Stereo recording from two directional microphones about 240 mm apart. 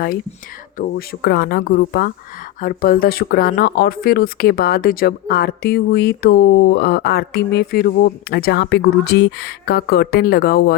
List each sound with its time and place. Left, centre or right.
0.8 s speech: left